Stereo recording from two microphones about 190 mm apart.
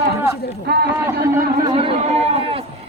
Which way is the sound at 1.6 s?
30° right (ahead or behind).